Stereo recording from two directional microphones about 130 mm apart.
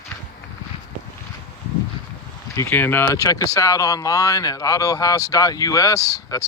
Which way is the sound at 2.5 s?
15° left (ahead or behind).